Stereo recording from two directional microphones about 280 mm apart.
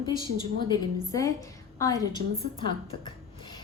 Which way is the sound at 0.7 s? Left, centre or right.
Centre.